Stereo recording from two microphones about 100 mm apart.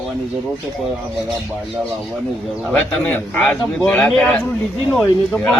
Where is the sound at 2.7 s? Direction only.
20° left (ahead or behind).